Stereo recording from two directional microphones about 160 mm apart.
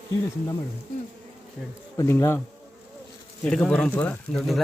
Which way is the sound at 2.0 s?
15° left (ahead or behind).